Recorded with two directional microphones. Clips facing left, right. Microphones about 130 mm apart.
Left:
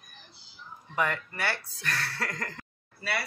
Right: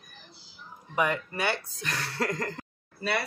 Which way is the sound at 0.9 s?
15° right (ahead or behind).